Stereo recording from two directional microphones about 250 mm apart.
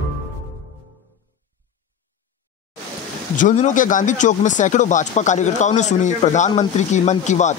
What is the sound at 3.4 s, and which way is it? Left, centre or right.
Speech, left.